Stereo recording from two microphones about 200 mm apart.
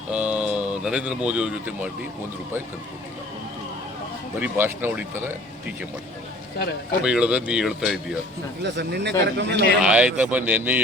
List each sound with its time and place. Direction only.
0.1 s speech: 5° right (ahead or behind)
4.4 s speech: 10° right (ahead or behind)
7.0 s speech: 5° right (ahead or behind)
8.6 s speech: 55° right (ahead or behind)
9.8 s speech: 5° right (ahead or behind)